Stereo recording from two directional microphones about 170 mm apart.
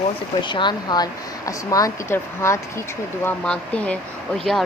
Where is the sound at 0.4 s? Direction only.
25° left (ahead or behind).